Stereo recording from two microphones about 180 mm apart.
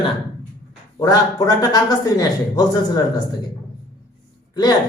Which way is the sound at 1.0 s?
20° left (ahead or behind).